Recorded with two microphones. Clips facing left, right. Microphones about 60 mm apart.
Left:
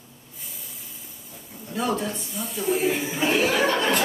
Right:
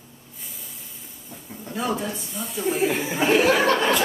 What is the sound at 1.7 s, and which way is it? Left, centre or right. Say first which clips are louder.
Speech: even; centre.